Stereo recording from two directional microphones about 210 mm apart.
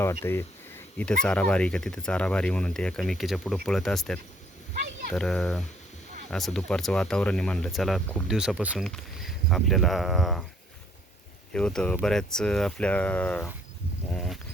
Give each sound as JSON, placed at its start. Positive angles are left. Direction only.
{"t": 0.0, "sound": "speech", "side_deg": 15}
{"t": 11.5, "sound": "speech", "side_deg": 5}
{"t": 14.1, "sound": "a sound", "side_deg": 5}